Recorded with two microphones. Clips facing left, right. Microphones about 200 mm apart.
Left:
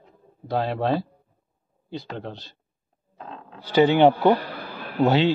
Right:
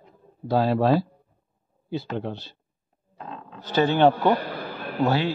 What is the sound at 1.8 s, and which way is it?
Speech, 5° right (ahead or behind).